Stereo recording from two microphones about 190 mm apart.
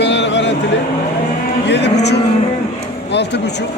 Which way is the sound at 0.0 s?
70° left (ahead or behind).